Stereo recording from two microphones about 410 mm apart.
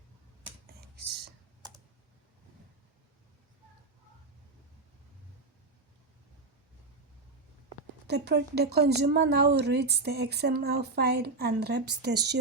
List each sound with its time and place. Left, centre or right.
0.9 s whispering: right
8.0 s speech: right